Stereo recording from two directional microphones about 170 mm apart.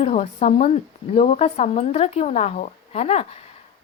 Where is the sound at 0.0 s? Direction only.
40° left (ahead or behind).